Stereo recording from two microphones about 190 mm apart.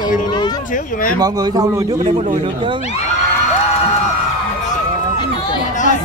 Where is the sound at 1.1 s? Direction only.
20° right (ahead or behind).